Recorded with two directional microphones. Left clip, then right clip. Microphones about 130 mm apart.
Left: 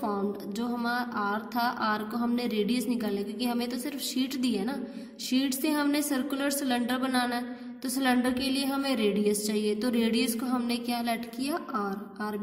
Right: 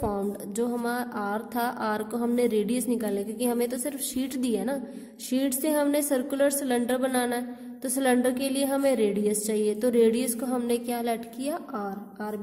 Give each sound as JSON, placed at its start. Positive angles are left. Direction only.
{"t": 0.0, "sound": "a woman's voice", "side_deg": -45}